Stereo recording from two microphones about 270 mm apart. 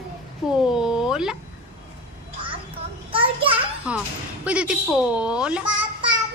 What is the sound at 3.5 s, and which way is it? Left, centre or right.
Children playing, centre.